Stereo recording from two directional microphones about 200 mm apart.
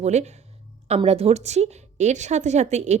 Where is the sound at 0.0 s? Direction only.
35° right (ahead or behind).